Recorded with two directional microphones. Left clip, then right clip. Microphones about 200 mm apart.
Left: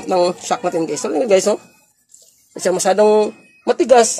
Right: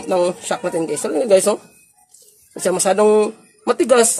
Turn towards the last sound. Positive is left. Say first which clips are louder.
# left 2 dB
turn(degrees=0)  # may be behind; listen again after turning